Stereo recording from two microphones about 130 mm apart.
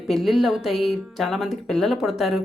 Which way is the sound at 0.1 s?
Centre (ahead or behind).